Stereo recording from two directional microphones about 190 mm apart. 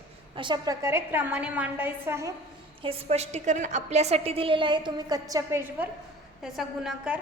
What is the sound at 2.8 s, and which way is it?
A woman's voice, 30° right (ahead or behind).